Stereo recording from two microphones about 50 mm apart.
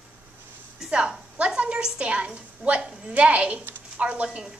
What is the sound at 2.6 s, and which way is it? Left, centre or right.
Speech, right.